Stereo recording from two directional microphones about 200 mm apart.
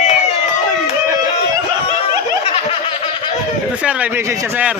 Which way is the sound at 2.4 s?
30° left (ahead or behind).